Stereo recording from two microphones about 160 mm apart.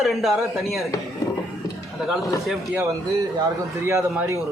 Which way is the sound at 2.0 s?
Centre (ahead or behind).